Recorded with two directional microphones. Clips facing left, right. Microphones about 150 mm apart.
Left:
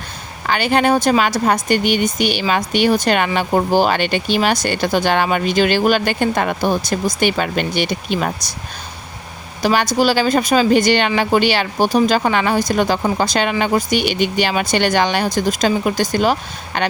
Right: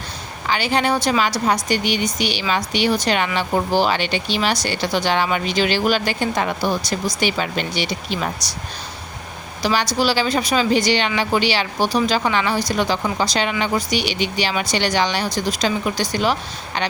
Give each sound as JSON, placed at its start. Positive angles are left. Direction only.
{"t": 0.4, "sound": "speech", "side_deg": 55}
{"t": 9.6, "sound": "speech", "side_deg": 50}